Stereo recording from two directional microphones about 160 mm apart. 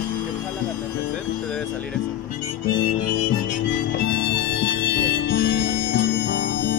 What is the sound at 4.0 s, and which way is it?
Music, 90° left.